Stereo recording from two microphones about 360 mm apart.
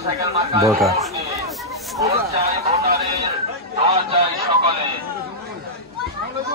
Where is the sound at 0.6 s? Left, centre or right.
Centre.